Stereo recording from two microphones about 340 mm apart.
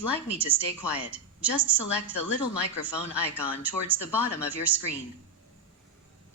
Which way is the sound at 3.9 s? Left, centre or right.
Centre.